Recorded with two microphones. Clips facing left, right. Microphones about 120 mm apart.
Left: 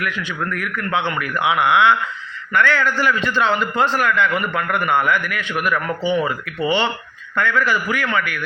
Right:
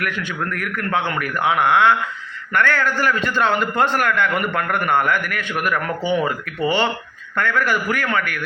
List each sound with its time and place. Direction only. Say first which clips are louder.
0.0 s a man's voice: even; 50° right (ahead or behind)